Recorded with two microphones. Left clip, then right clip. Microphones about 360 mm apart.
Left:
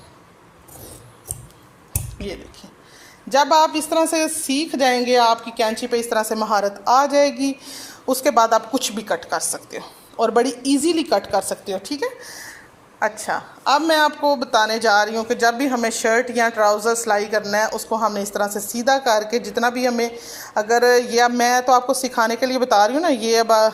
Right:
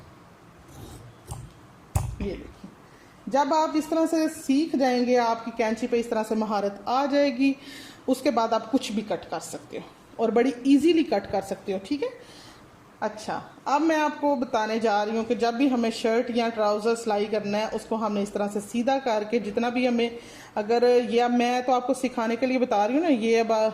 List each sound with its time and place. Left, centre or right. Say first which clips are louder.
3.2 s a woman's voice: left 8 dB; left
6.8 s speech: left 8 dB; centre
8.0 s speech: left 8 dB; left
10.4 s speech: left 2 dB; centre
11.3 s a woman's voice: left 6 dB; left
13.2 s speech: left 9 dB; left